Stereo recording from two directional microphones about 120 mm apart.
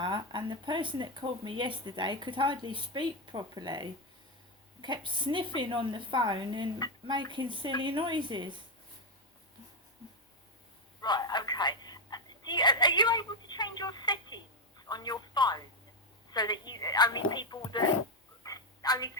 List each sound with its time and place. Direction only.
0.0 s speech: 40° right (ahead or behind)
11.0 s telephone: 35° left (ahead or behind)
16.3 s whispering: 35° left (ahead or behind)
18.4 s a sound: 30° left (ahead or behind)